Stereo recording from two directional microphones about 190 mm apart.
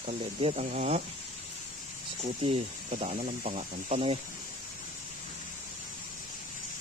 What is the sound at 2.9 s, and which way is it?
Speech, 35° right (ahead or behind).